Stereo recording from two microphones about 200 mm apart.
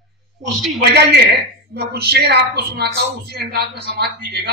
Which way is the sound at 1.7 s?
55° right (ahead or behind).